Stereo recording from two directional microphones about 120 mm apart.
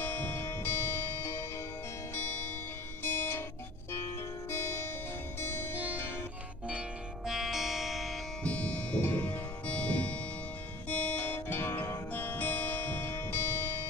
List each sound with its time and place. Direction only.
0.0 s music: 15° left (ahead or behind)
3.0 s music: 15° left (ahead or behind)
4.5 s music: 20° left (ahead or behind)
7.2 s music: centre (ahead or behind)
8.5 s music: 10° left (ahead or behind)